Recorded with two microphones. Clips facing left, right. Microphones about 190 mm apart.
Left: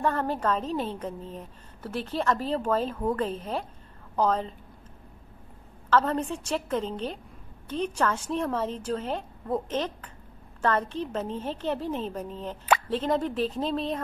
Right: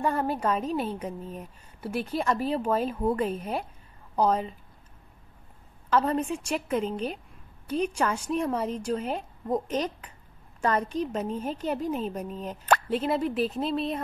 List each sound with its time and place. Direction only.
0.0 s a woman's voice: 10° right (ahead or behind)
5.9 s a woman's voice: 10° right (ahead or behind)